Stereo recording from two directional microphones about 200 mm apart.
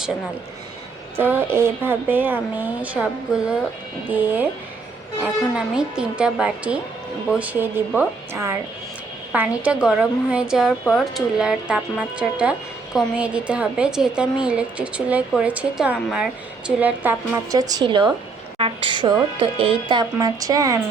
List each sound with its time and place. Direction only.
1.1 s a woman's voice: 10° right (ahead or behind)